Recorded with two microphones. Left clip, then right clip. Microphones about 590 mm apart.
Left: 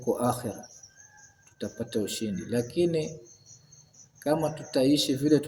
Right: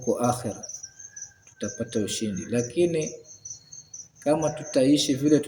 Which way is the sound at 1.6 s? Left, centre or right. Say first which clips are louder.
Right 2 dB; left.